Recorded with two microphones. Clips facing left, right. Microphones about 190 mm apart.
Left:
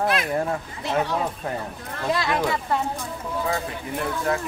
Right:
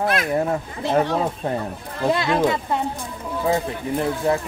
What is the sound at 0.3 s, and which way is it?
Speech, 15° right (ahead or behind).